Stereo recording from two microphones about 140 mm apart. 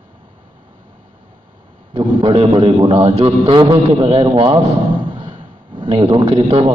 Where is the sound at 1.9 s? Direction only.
40° right (ahead or behind).